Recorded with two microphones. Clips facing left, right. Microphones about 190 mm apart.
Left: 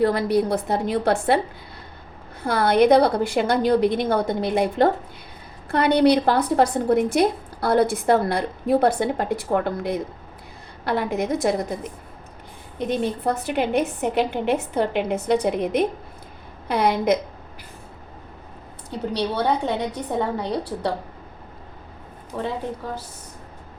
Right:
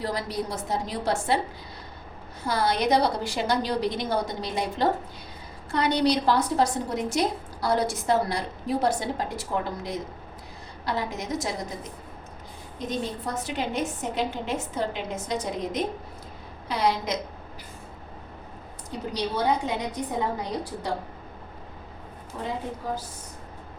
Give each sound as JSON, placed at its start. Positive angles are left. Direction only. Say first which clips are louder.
{"t": 0.0, "sound": "a woman's voice", "louder": "left 10 dB", "side_deg": 60}
{"t": 2.4, "sound": "a woman's voice", "louder": "left 7 dB", "side_deg": 60}
{"t": 18.9, "sound": "a woman's voice", "louder": "left 5 dB", "side_deg": 65}
{"t": 22.3, "sound": "a woman's voice", "louder": "left 7 dB", "side_deg": 60}